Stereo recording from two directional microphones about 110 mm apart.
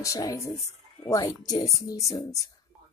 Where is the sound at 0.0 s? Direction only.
30° left (ahead or behind).